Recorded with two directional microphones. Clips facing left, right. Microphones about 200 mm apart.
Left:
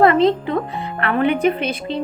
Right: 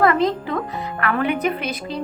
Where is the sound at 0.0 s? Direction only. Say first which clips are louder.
Left 4 dB; 25° left (ahead or behind).